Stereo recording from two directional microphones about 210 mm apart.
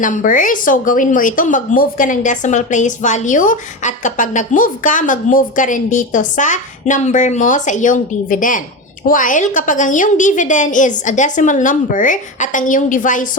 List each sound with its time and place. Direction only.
0.0 s a woman's voice: 40° left (ahead or behind)